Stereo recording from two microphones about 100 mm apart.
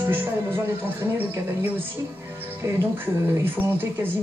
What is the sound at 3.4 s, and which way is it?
Speech, 20° right (ahead or behind).